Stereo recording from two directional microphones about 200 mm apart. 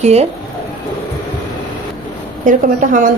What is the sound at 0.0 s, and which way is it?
Speech, 30° right (ahead or behind).